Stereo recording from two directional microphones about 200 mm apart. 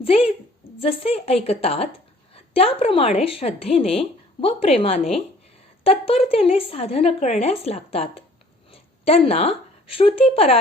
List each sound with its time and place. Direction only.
0.0 s a woman's voice: 30° left (ahead or behind)